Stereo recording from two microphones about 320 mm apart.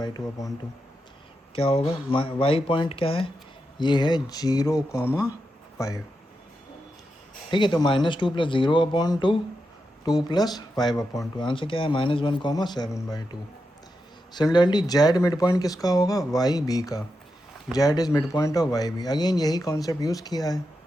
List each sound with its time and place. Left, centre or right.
0.0 s speech: centre
1.5 s speech: centre
7.5 s speech: centre
14.3 s speech: centre